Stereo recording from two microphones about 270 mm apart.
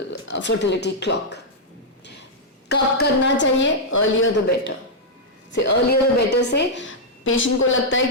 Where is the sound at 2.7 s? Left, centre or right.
Left.